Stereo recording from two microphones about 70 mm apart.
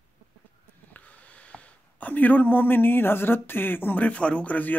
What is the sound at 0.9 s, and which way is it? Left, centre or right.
Speech, left.